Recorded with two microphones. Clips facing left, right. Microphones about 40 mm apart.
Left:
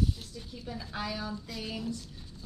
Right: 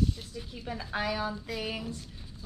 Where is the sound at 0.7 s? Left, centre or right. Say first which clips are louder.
Right 5 dB; right.